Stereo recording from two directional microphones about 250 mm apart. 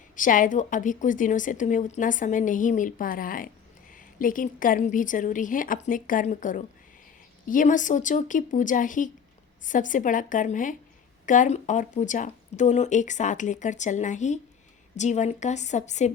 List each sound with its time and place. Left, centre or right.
0.2 s a woman's voice: left